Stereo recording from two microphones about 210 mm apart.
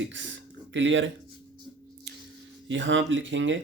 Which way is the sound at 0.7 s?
60° right (ahead or behind).